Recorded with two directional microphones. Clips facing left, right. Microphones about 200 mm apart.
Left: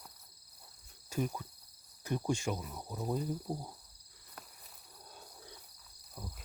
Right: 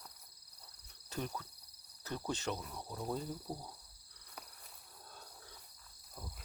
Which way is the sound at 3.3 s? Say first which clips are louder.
Left 5 dB; 20° left (ahead or behind).